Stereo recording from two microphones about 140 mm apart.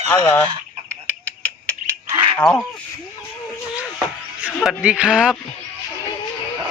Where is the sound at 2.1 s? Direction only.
40° right (ahead or behind).